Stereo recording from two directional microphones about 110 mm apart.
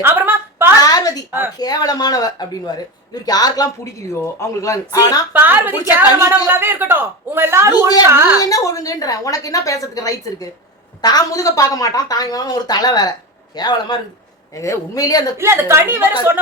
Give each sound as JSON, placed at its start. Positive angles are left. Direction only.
{"t": 0.0, "sound": "a sound", "side_deg": -20}
{"t": 0.8, "sound": "a sound", "side_deg": 35}
{"t": 1.5, "sound": "a woman's voice", "side_deg": 35}
{"t": 5.3, "sound": "a woman's voice", "side_deg": -15}
{"t": 8.4, "sound": "a woman's voice", "side_deg": 30}
{"t": 14.5, "sound": "a woman's voice", "side_deg": 30}
{"t": 15.4, "sound": "a man's voice", "side_deg": -25}